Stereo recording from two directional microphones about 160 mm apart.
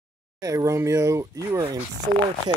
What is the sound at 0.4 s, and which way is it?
Speech, 20° right (ahead or behind).